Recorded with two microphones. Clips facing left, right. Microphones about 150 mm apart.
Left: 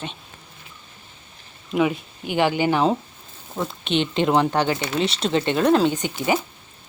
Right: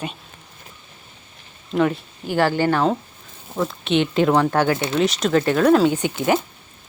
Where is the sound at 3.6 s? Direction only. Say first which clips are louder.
Right 3 dB; centre (ahead or behind).